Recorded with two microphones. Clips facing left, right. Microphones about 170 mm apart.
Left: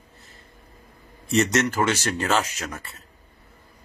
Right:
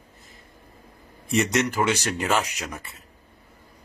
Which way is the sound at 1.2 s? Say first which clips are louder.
Left 2 dB; 15° right (ahead or behind).